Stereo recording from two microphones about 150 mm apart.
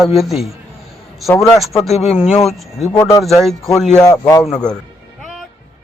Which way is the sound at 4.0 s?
25° left (ahead or behind).